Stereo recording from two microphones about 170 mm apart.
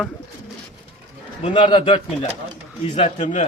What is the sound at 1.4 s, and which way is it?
A man's voice, 30° left (ahead or behind).